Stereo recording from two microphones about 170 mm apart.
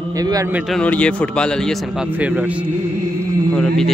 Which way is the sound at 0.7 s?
5° left (ahead or behind).